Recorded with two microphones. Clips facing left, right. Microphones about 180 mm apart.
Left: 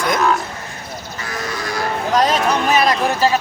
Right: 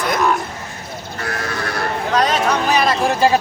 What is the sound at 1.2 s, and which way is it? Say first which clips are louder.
Sheep: right 2 dB; 60° right (ahead or behind).